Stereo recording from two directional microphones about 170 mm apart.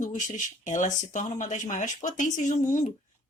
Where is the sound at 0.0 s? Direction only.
50° left (ahead or behind).